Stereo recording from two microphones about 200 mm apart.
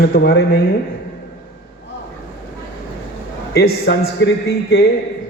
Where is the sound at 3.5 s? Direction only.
55° left (ahead or behind).